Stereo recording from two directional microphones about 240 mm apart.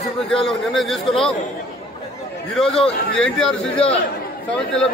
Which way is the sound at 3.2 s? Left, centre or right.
Centre.